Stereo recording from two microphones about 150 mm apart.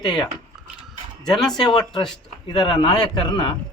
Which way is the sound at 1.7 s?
30° left (ahead or behind).